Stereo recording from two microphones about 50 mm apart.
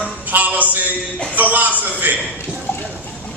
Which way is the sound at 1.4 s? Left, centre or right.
Right.